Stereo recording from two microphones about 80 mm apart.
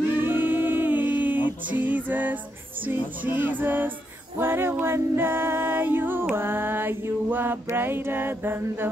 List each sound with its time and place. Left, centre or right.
0.1 s music: right
3.3 s mantra: right